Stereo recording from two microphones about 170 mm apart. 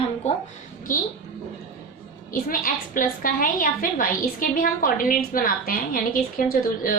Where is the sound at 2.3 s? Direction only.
55° left (ahead or behind).